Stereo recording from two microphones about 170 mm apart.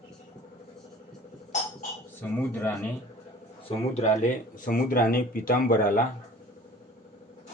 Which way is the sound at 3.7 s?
40° left (ahead or behind).